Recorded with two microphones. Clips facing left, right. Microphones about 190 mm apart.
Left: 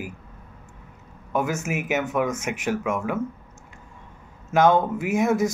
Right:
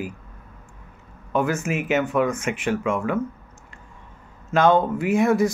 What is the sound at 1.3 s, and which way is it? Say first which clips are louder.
Speech: right 2 dB; 15° left (ahead or behind).